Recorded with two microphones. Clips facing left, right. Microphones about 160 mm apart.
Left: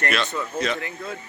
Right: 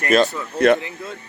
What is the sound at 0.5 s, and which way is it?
Speech, 55° right (ahead or behind).